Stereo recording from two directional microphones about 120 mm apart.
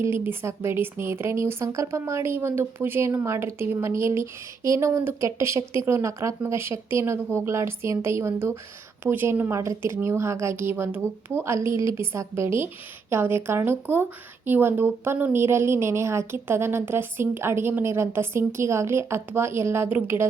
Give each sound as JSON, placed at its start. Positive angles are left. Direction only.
{"t": 0.0, "sound": "a woman's voice", "side_deg": -20}